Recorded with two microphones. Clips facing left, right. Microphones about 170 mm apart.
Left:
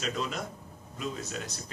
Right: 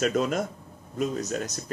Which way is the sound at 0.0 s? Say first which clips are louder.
Right 9 dB; 50° right (ahead or behind).